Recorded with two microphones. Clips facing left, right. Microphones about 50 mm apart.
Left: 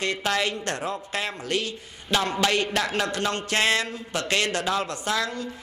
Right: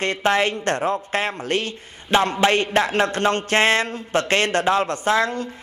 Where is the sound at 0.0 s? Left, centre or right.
Right.